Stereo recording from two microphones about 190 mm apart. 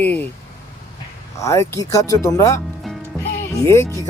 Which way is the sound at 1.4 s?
15° left (ahead or behind).